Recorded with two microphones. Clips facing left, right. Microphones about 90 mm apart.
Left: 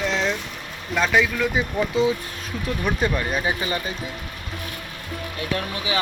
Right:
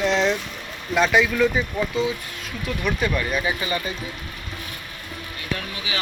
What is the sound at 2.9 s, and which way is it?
Speech, 35° left (ahead or behind).